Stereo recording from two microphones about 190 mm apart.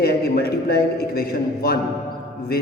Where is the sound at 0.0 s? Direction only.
55° left (ahead or behind).